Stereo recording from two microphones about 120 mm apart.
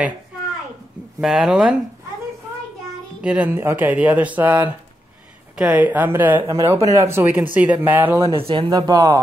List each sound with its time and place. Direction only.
1.2 s speech: 5° right (ahead or behind)
3.2 s speech: 10° right (ahead or behind)
8.4 s speech: 50° right (ahead or behind)
8.6 s speech: 30° right (ahead or behind)